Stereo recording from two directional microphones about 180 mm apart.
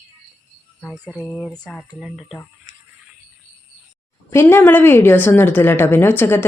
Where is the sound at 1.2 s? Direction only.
5° left (ahead or behind).